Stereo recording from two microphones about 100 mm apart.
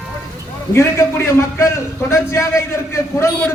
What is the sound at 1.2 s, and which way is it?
A man's voice, 30° left (ahead or behind).